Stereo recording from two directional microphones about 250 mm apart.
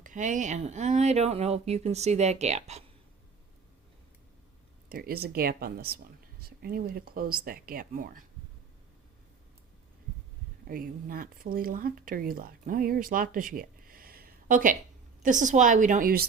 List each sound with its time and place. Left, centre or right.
0.0 s speech: right
4.9 s speech: right
10.7 s speech: right